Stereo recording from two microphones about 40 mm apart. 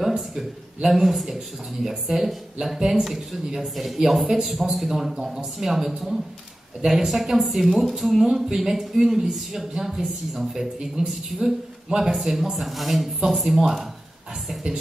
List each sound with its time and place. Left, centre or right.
0.0 s speech: centre
8.3 s speech: right
8.5 s speech: centre